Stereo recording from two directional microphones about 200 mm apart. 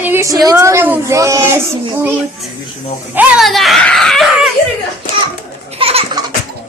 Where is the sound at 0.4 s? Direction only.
15° right (ahead or behind).